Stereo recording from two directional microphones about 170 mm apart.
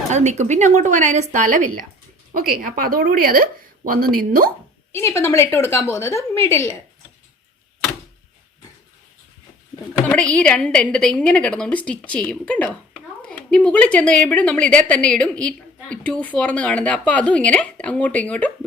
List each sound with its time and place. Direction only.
0.1 s a woman's voice: 45° right (ahead or behind)
4.9 s a woman's voice: 15° left (ahead or behind)
10.1 s a woman's voice: 5° left (ahead or behind)